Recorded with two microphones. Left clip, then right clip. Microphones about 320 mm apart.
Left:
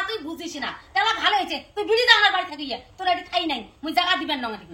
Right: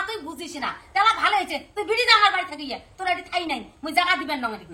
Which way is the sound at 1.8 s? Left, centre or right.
Centre.